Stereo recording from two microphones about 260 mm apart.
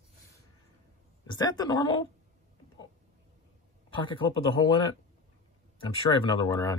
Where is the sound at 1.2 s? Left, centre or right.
Centre.